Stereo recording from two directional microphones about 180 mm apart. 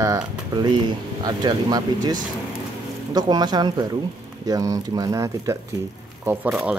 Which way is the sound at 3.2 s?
25° right (ahead or behind).